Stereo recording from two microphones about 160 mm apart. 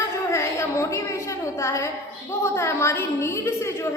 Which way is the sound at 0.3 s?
15° left (ahead or behind).